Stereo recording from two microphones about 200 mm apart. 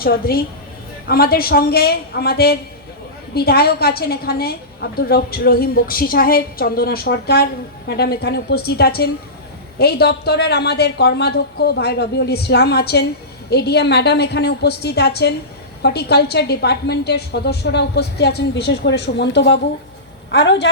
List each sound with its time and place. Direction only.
0.0 s a woman's voice: 50° left (ahead or behind)